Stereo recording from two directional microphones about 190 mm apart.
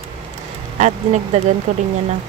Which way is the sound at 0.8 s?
35° right (ahead or behind).